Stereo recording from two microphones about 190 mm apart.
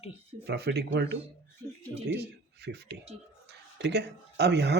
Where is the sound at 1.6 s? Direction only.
25° right (ahead or behind).